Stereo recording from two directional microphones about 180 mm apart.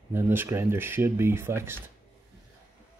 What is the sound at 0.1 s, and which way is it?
Speech, 10° right (ahead or behind).